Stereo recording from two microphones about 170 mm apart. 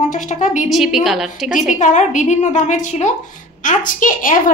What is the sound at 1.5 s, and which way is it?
A woman's voice, 45° left (ahead or behind).